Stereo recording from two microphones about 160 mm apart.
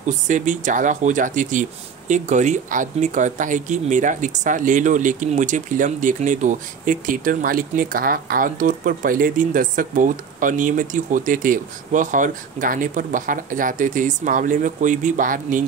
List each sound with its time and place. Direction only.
0.0 s speech: 50° right (ahead or behind)